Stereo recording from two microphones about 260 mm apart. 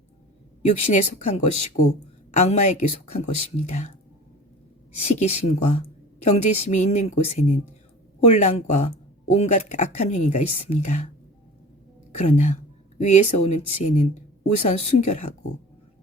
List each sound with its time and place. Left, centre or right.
0.6 s speech: left
6.2 s speech: left
12.1 s speech: left